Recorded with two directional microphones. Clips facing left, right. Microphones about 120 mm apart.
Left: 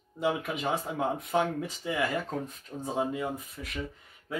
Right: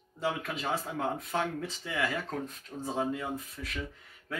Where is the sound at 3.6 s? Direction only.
20° left (ahead or behind).